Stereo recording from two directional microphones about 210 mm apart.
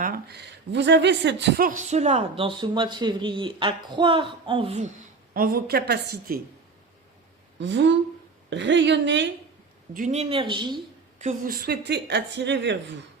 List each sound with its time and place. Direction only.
0.0 s speech: 45° right (ahead or behind); by 4.9 s 30° right (ahead or behind)
5.3 s speech: 45° right (ahead or behind)
7.6 s a woman's voice: 60° right (ahead or behind)
9.9 s speech: 35° right (ahead or behind)
11.2 s speech: 40° right (ahead or behind); by 12.7 s 55° right (ahead or behind)